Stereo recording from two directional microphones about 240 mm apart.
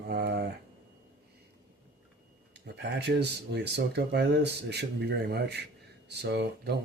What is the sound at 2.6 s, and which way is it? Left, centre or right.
Speech, right.